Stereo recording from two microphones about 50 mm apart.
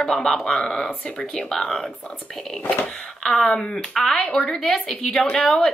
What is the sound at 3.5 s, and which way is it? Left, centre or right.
Speech, centre.